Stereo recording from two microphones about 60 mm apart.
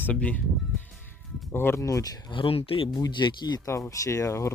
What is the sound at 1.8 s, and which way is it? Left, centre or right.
Speech, left.